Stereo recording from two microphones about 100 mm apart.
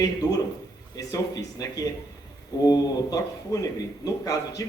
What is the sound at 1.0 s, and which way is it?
A woman's voice, 35° left (ahead or behind).